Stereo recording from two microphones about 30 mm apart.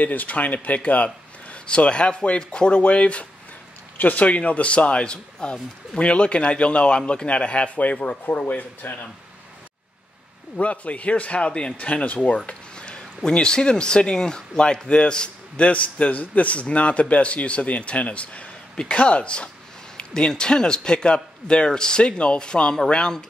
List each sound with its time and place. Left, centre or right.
0.0 s a man's voice: left
4.0 s a man's voice: left
8.8 s speech: left
10.6 s a man's voice: left
11.7 s a man's voice: left
12.7 s speech: left
15.5 s a man's voice: left